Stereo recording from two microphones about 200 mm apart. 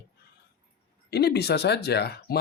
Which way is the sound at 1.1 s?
55° left (ahead or behind).